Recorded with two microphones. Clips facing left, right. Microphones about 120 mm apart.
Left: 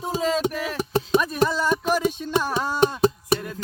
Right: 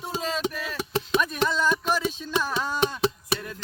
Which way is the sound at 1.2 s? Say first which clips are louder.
Left 3 dB; 35° left (ahead or behind).